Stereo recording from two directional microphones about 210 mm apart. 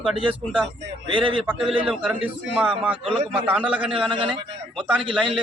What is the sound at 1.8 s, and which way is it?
Speech, 5° right (ahead or behind).